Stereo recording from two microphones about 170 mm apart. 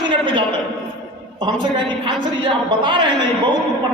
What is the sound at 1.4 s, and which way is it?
A woman's voice, 30° right (ahead or behind).